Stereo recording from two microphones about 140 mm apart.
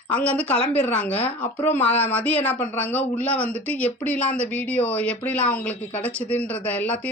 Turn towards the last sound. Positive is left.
turn(degrees=10)  # may be behind; listen again after turning